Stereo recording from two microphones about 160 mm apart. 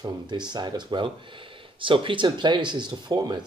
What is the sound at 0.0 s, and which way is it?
Speech, 25° right (ahead or behind).